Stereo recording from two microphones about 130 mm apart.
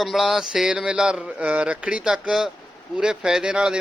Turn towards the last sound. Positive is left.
turn(degrees=-5)  # may be behind; listen again after turning